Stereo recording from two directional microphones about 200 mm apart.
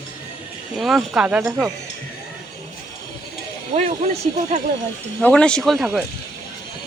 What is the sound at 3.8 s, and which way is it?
Speech, 30° right (ahead or behind).